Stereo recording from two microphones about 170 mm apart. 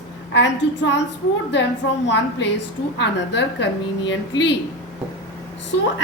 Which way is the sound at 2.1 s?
90° left.